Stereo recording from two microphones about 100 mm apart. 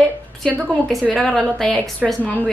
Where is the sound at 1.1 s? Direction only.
5° left (ahead or behind).